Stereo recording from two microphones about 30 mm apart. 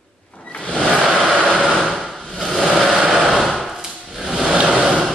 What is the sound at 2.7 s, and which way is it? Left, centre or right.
Vehicle, centre.